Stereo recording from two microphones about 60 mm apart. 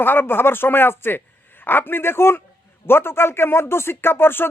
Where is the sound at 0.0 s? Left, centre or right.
Left.